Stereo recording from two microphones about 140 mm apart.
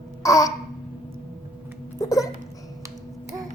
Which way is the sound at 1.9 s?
25° left (ahead or behind).